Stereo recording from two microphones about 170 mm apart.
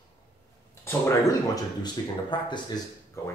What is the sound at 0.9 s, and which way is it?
Speech, 20° left (ahead or behind).